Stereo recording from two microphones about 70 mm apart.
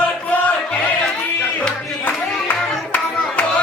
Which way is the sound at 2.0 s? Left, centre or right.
Left.